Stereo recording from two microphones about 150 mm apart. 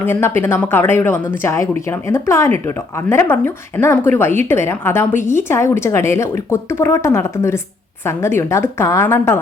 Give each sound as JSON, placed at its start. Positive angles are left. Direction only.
{"t": 0.0, "sound": "speech", "side_deg": 15}